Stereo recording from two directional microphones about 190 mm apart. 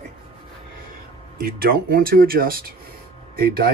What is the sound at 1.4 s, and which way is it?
Speech, 50° right (ahead or behind).